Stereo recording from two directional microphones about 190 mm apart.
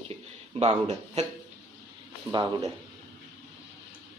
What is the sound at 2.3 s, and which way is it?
Speech, 25° right (ahead or behind).